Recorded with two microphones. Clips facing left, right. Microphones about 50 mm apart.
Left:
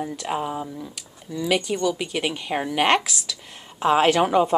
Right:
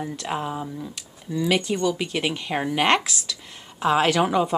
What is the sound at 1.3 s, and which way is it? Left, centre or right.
A woman's voice, centre.